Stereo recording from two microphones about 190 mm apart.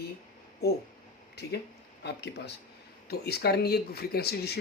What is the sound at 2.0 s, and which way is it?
Speech, 60° left (ahead or behind).